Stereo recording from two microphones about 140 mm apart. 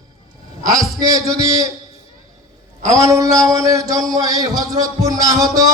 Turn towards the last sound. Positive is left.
turn(degrees=-25)  # may be behind; listen again after turning